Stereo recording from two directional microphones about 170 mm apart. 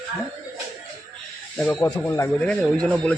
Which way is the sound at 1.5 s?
10° left (ahead or behind).